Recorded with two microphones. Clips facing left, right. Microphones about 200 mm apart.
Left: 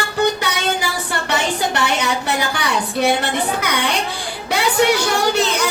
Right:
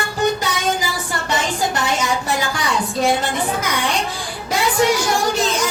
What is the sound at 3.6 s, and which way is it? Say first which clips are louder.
Music: left 1 dB; 65° left (ahead or behind).